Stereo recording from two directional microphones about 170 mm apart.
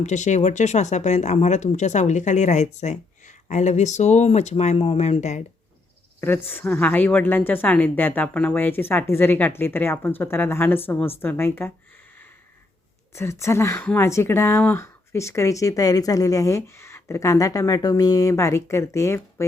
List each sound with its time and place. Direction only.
0.0 s speech: 45° left (ahead or behind)
6.1 s speech: 15° left (ahead or behind)
13.1 s speech: 15° left (ahead or behind)